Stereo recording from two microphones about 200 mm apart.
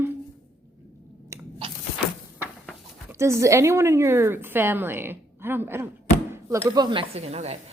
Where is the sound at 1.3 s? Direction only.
15° right (ahead or behind).